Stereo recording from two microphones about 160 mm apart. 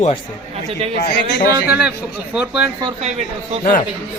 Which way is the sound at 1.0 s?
65° left (ahead or behind).